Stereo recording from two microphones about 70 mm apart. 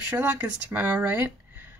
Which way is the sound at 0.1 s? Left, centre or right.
Right.